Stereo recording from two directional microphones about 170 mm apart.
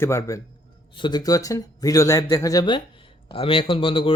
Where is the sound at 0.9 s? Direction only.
25° left (ahead or behind).